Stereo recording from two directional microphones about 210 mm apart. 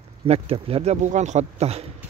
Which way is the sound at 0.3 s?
25° right (ahead or behind).